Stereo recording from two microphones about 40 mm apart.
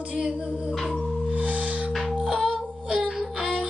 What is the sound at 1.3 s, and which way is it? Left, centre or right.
Music, right.